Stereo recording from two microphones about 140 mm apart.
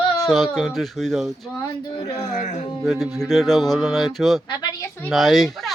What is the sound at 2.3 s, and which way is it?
Speech, 55° left (ahead or behind).